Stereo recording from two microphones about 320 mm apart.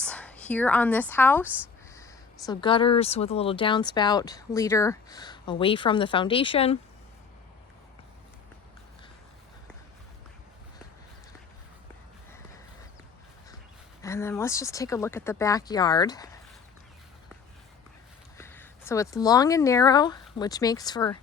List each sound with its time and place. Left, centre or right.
0.0 s a sound: centre
1.1 s speech: centre
1.5 s speech: centre
2.5 s speech: centre
14.0 s speech: centre
18.3 s speech: centre